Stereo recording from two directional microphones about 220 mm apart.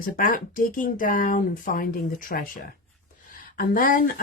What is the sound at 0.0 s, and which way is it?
Speech, 40° left (ahead or behind).